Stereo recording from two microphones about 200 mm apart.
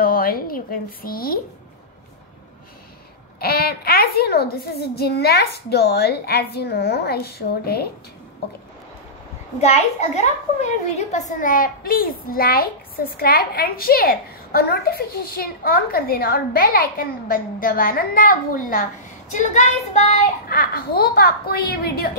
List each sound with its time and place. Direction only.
0.0 s a woman's voice: 45° left (ahead or behind)
3.3 s a woman's voice: 50° left (ahead or behind)
9.6 s a woman's voice: 35° left (ahead or behind)
20.4 s a woman's voice: 50° left (ahead or behind)